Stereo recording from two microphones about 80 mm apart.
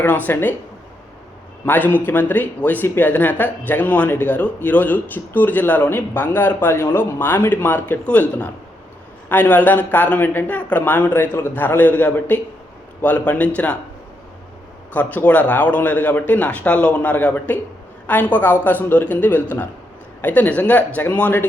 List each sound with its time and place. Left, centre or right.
0.0 s speech: left
1.6 s speech: left
14.9 s speech: centre